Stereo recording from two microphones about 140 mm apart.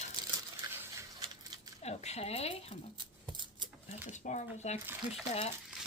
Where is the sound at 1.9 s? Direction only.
50° left (ahead or behind).